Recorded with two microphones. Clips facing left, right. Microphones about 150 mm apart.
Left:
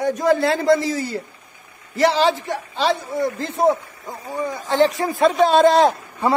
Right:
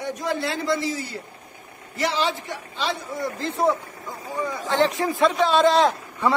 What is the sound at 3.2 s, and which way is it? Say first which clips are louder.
Speech: left 2 dB; 50° left (ahead or behind).